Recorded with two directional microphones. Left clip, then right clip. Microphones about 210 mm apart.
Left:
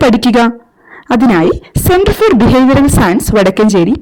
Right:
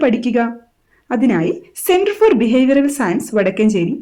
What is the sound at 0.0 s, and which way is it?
A woman's voice, 45° left (ahead or behind).